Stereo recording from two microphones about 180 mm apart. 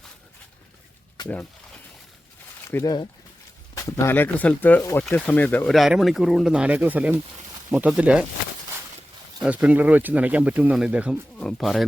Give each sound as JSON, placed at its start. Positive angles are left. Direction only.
{"t": 2.6, "sound": "speech", "side_deg": 20}
{"t": 9.4, "sound": "speech", "side_deg": -5}